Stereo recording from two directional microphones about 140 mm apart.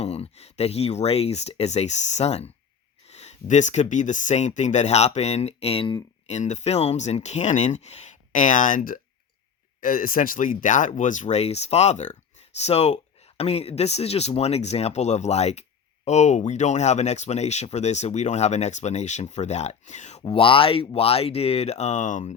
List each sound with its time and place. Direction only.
0.0 s speech: 50° left (ahead or behind)
6.2 s speech: 55° left (ahead or behind)
20.2 s speech: 40° left (ahead or behind); by 22.4 s 60° left (ahead or behind)